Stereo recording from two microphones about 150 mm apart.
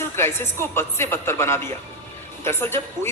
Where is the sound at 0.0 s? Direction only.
15° left (ahead or behind).